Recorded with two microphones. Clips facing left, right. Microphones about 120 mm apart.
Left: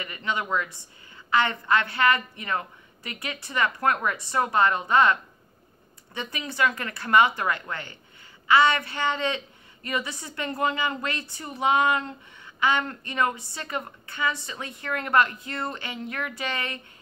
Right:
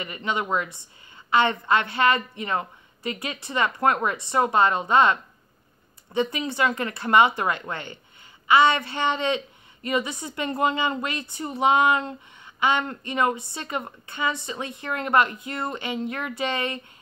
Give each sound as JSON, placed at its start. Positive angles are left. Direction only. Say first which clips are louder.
{"t": 0.0, "sound": "a woman's voice", "louder": "right 2 dB", "side_deg": -20}